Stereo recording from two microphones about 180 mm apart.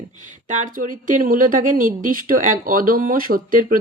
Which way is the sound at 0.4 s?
45° right (ahead or behind).